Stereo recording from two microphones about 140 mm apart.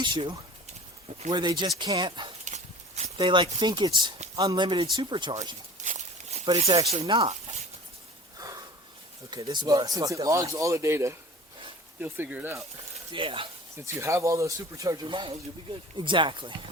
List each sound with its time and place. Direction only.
0.0 s speech: 35° right (ahead or behind)
2.4 s dog: 55° right (ahead or behind)
3.2 s speech: 35° right (ahead or behind)
5.8 s a sound: 60° right (ahead or behind)
6.6 s speech: 45° right (ahead or behind)
8.4 s snort: 25° right (ahead or behind)
9.3 s speech: 30° right (ahead or behind); by 12.5 s 15° right (ahead or behind)
13.1 s speech: 40° right (ahead or behind)
13.7 s speech: 20° right (ahead or behind)
15.0 s speech: 35° right (ahead or behind)